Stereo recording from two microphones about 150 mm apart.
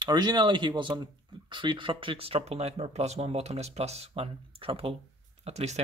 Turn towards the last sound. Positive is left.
turn(degrees=-45)  # may be behind; listen again after turning